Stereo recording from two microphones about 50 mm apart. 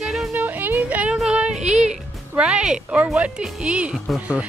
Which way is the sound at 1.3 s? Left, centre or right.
Right.